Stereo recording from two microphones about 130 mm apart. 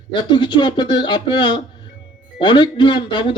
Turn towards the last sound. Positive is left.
turn(degrees=40)  # may be behind; listen again after turning